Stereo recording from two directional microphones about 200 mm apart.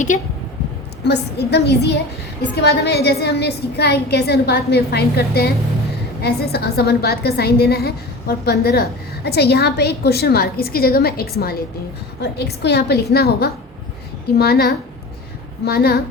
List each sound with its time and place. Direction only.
1.0 s a woman's voice: 55° left (ahead or behind)